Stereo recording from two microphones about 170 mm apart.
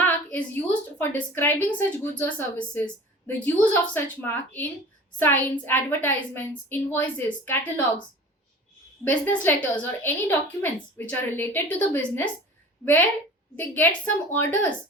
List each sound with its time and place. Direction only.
0.0 s a woman's voice: 10° left (ahead or behind)
9.0 s a woman's voice: 10° left (ahead or behind)